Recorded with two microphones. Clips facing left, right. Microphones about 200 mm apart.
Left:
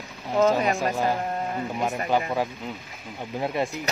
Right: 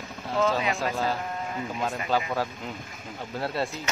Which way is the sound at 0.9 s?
15° left (ahead or behind).